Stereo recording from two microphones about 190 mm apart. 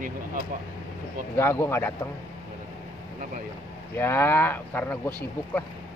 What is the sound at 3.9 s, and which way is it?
Speech, 10° left (ahead or behind).